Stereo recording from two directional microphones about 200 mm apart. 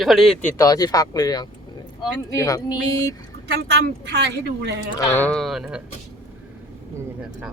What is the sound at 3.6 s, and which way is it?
Speech, 55° right (ahead or behind).